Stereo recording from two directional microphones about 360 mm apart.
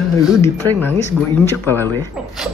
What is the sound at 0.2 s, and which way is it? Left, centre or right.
Speech, centre.